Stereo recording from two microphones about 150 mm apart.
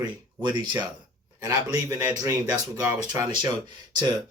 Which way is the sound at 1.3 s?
20° right (ahead or behind).